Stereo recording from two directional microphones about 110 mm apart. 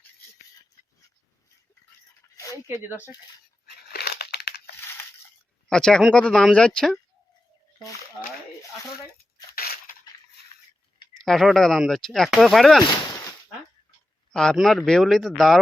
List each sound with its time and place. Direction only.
2.3 s a sound: 30° left (ahead or behind)
4.8 s crushing: 20° left (ahead or behind)
5.6 s speech: 5° left (ahead or behind)
11.2 s speech: centre (ahead or behind)
12.8 s a sound: 35° left (ahead or behind)
14.3 s speech: 5° left (ahead or behind)